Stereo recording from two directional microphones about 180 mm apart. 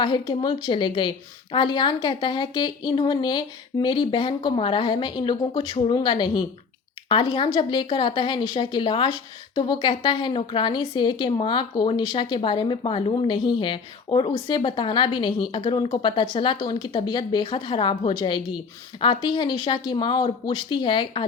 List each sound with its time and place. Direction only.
0.0 s speech: 25° left (ahead or behind)